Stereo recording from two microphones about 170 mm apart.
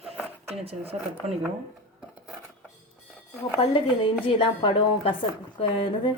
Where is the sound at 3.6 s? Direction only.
30° left (ahead or behind).